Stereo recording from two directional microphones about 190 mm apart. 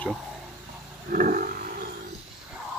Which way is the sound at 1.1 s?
45° right (ahead or behind).